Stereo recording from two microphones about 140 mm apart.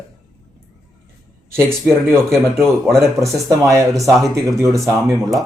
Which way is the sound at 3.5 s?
20° right (ahead or behind).